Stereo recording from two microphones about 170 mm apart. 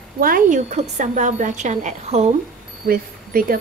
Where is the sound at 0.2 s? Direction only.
55° right (ahead or behind).